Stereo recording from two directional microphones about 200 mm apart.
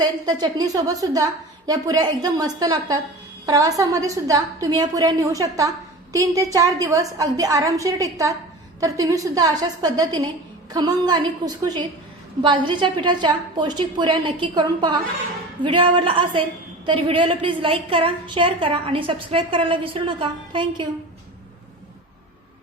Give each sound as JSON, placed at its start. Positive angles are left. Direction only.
{"t": 0.0, "sound": "a woman's voice", "side_deg": -20}